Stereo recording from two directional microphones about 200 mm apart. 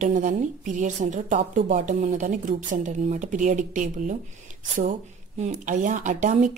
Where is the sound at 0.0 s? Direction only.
40° right (ahead or behind).